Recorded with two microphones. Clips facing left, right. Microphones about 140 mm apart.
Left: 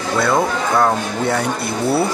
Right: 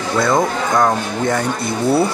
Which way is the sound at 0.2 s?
5° left (ahead or behind).